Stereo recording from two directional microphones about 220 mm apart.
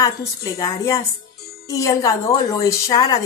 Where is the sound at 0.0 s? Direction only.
15° left (ahead or behind).